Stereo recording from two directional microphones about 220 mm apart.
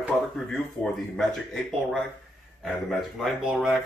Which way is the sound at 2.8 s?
Centre (ahead or behind).